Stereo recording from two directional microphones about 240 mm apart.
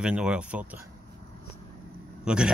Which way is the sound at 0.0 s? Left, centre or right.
Centre.